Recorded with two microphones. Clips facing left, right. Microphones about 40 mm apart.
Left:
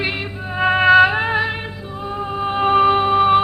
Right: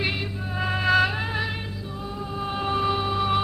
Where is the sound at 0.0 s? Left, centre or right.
Left.